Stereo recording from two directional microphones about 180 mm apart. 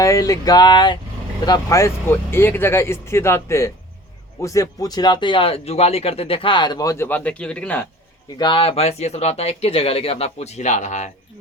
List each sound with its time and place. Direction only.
0.0 s speech: 20° left (ahead or behind)
8.4 s speech: 30° left (ahead or behind)